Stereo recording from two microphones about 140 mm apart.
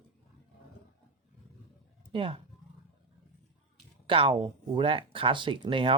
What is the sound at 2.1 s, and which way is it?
Speech, 40° right (ahead or behind).